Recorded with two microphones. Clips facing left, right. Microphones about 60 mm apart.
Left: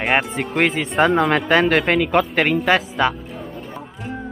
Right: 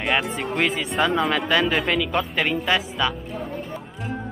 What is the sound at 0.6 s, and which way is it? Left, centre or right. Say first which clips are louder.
Speech: left 5 dB; left.